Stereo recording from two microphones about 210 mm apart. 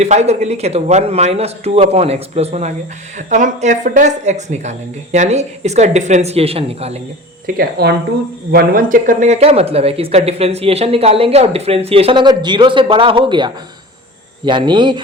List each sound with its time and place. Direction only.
0.0 s speech: 30° right (ahead or behind)
7.4 s speech: 45° right (ahead or behind); by 15.0 s 20° right (ahead or behind)